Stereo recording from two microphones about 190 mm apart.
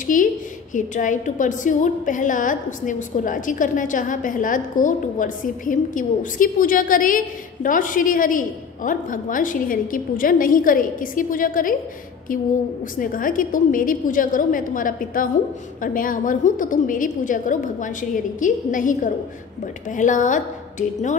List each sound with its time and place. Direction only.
0.0 s a woman's voice: 45° left (ahead or behind)
13.0 s a woman's voice: 45° left (ahead or behind)